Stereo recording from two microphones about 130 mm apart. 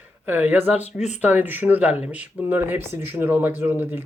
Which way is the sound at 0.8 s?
60° left (ahead or behind).